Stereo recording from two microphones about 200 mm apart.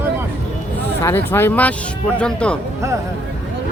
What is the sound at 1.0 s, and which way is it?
Speech, 10° left (ahead or behind).